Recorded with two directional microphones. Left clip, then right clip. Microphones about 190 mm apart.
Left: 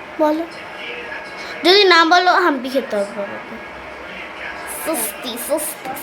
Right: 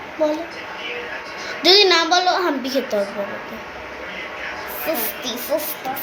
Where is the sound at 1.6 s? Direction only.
15° left (ahead or behind).